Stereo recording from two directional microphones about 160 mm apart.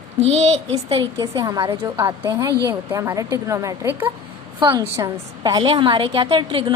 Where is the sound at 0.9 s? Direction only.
30° right (ahead or behind).